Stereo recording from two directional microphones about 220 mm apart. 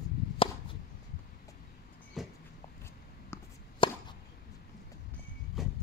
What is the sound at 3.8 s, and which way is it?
Chop, 20° left (ahead or behind).